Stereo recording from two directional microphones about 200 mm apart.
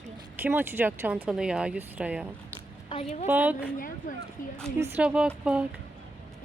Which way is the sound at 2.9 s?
30° left (ahead or behind).